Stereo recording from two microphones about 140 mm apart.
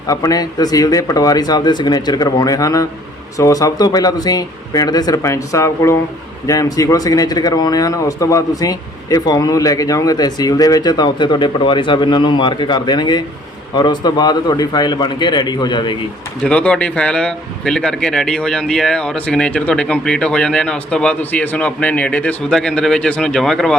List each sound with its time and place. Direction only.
0.1 s a man's voice: 25° left (ahead or behind)
16.4 s speech: 5° left (ahead or behind)